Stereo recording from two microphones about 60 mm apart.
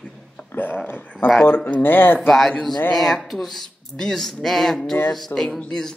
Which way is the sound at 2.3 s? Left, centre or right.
Centre.